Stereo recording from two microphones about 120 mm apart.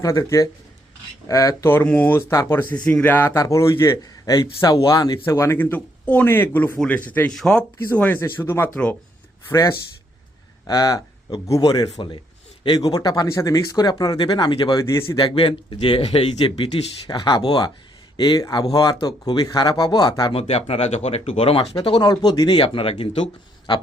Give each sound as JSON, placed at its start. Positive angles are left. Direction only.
{"t": 0.0, "sound": "a man's voice", "side_deg": 25}
{"t": 2.3, "sound": "a man's voice", "side_deg": 30}
{"t": 2.8, "sound": "a man's voice", "side_deg": 10}
{"t": 5.2, "sound": "speech", "side_deg": 20}
{"t": 7.9, "sound": "a man's voice", "side_deg": 15}
{"t": 14.8, "sound": "a man's voice", "side_deg": 25}
{"t": 15.1, "sound": "speech", "side_deg": 45}
{"t": 20.3, "sound": "speech", "side_deg": 55}
{"t": 21.8, "sound": "speech", "side_deg": 40}